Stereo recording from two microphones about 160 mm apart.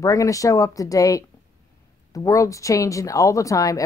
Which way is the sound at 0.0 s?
20° left (ahead or behind).